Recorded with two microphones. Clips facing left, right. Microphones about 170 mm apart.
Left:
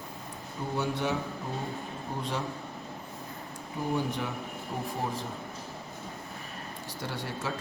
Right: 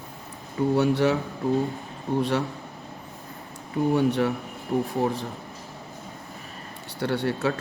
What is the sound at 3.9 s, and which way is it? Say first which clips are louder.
Speech: right 10 dB; 70° right (ahead or behind).